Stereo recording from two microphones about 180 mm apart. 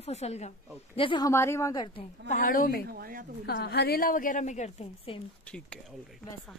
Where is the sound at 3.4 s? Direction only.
65° left (ahead or behind); by 5.2 s 35° left (ahead or behind).